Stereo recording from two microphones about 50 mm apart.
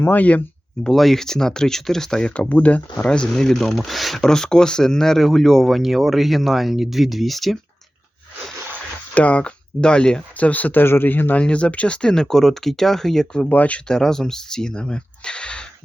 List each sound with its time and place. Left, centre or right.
0.0 s speech: left
0.9 s speech: centre
2.5 s speech: left
3.3 s speech: centre
4.2 s speech: centre
9.1 s speech: left
10.8 s speech: left
11.3 s speech: left
13.5 s speech: left
13.8 s speech: centre